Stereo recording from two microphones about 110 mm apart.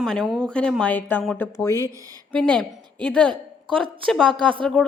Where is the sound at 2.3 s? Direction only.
10° left (ahead or behind).